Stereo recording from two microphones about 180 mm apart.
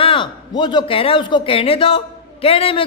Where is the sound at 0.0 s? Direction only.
30° left (ahead or behind).